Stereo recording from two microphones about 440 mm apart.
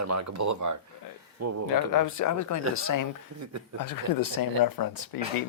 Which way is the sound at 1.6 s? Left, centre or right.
Left.